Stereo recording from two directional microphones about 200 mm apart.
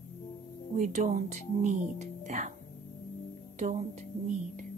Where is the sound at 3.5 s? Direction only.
40° right (ahead or behind).